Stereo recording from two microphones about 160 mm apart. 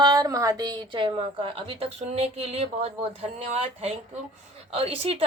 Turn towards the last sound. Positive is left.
turn(degrees=-35)  # may be behind; listen again after turning